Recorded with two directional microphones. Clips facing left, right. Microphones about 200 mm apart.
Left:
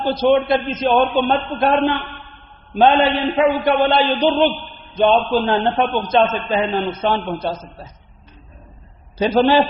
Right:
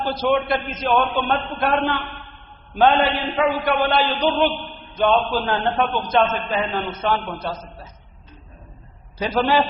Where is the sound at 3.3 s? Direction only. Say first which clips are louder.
Left 4 dB; 20° left (ahead or behind).